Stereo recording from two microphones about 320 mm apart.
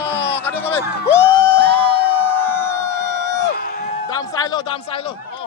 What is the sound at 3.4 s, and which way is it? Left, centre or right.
Crowd, left.